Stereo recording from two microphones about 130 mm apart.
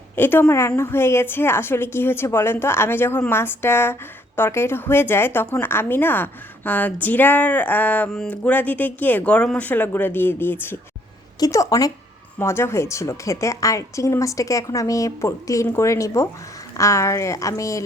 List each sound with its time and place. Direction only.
0.2 s speech: 15° left (ahead or behind)
11.3 s a woman's voice: 25° left (ahead or behind)